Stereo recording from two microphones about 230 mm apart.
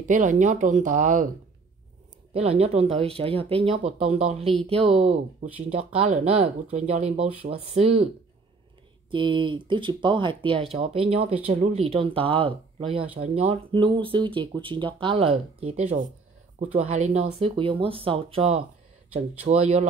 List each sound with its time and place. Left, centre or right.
0.0 s speech: right
2.3 s speech: right
9.1 s speech: right